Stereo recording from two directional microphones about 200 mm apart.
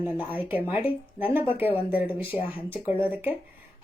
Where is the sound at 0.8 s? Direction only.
25° left (ahead or behind).